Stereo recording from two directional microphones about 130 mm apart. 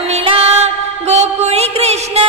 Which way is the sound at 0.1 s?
45° right (ahead or behind).